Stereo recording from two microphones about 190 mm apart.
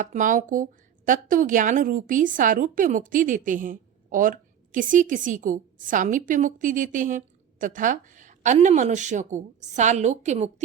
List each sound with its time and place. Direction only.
0.0 s a woman's voice: 40° right (ahead or behind)